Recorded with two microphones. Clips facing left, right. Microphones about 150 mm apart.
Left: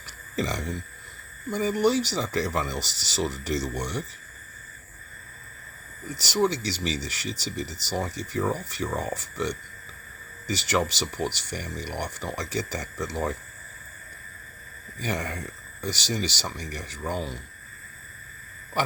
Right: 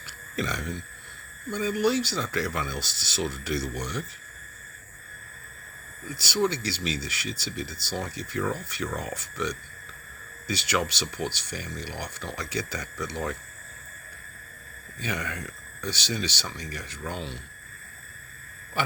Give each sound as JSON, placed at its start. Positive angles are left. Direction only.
{"t": 0.3, "sound": "speech", "side_deg": 35}
{"t": 6.1, "sound": "speech", "side_deg": 40}
{"t": 15.0, "sound": "speech", "side_deg": 40}